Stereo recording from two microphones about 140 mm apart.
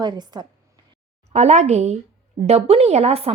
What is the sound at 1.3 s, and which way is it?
A woman's voice, 55° right (ahead or behind).